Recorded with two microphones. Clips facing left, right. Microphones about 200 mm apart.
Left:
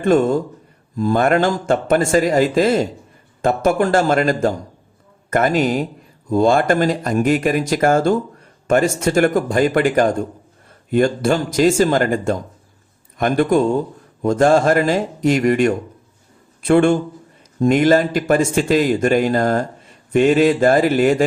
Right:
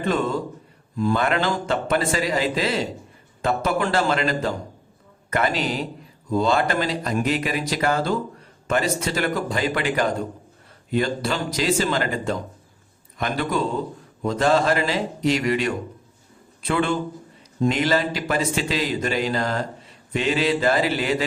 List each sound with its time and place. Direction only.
0.0 s speech: 45° left (ahead or behind)